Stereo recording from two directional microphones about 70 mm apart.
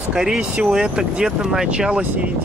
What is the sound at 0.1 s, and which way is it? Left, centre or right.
Speech, centre.